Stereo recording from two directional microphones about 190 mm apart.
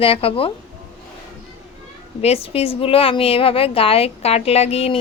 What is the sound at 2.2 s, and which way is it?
A woman's voice, 30° left (ahead or behind).